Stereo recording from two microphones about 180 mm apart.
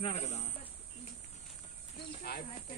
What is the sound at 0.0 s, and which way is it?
Speech, 40° left (ahead or behind).